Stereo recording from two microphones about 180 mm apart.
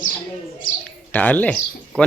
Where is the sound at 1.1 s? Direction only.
10° left (ahead or behind).